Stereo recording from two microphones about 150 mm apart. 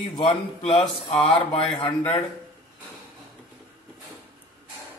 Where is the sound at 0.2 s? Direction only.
35° left (ahead or behind).